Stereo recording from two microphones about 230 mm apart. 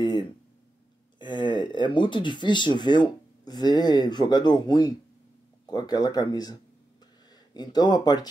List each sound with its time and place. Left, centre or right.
0.0 s a sound: centre
1.2 s speech: centre
7.5 s speech: centre